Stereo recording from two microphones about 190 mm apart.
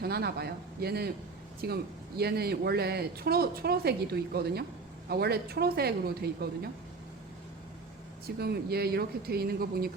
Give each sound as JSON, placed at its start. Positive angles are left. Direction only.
{"t": 0.0, "sound": "speech", "side_deg": -55}
{"t": 8.4, "sound": "speech", "side_deg": -55}